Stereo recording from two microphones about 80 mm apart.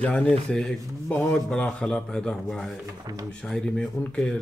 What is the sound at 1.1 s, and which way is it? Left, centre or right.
A man's voice, left.